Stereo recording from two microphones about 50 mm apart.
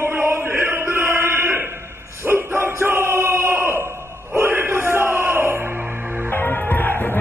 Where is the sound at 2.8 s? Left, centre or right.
Right.